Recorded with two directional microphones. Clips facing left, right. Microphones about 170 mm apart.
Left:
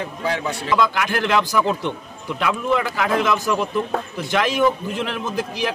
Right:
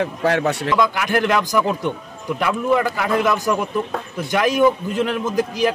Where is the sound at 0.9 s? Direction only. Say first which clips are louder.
Right 1 dB; 10° right (ahead or behind).